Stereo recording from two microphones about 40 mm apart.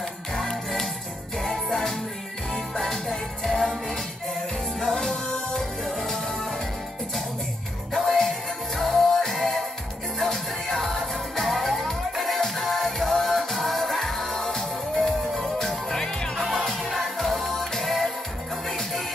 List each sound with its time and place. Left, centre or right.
0.3 s music: centre
5.9 s music: centre
7.9 s music: centre